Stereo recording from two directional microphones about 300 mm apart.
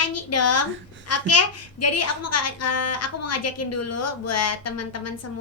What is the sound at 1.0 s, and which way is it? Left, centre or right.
A woman's voice, left.